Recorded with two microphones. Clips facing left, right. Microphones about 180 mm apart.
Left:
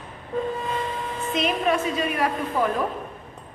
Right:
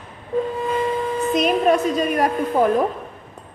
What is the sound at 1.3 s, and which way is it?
A woman's voice, 40° right (ahead or behind).